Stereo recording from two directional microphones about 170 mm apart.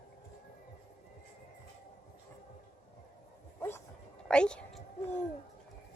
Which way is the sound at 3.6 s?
15° left (ahead or behind).